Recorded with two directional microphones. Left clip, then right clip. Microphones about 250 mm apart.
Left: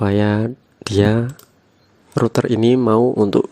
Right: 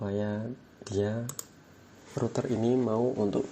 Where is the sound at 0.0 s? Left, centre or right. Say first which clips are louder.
Left 15 dB; left.